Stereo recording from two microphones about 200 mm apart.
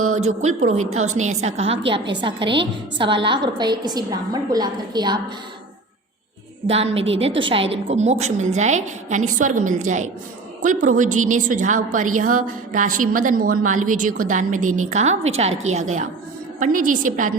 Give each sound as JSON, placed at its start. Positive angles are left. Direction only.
{"t": 0.2, "sound": "a woman's voice", "side_deg": -35}
{"t": 6.7, "sound": "a woman's voice", "side_deg": -30}